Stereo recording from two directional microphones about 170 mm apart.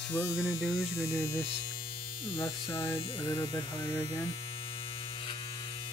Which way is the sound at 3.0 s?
30° left (ahead or behind).